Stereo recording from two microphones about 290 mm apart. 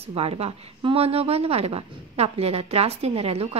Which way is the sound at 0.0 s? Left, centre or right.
Centre.